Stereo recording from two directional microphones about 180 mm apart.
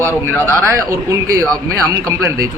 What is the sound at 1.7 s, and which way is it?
Speech, 15° right (ahead or behind).